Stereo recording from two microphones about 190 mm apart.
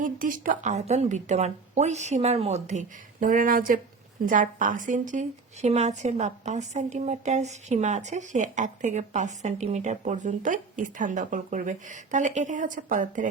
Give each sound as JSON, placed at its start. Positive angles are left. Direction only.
{"t": 0.0, "sound": "a woman's voice", "side_deg": -45}